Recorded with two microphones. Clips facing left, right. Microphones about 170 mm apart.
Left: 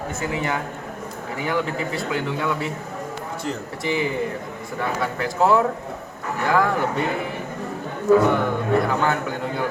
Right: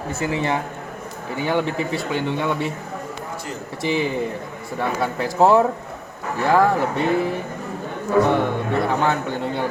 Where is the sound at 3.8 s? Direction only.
25° right (ahead or behind).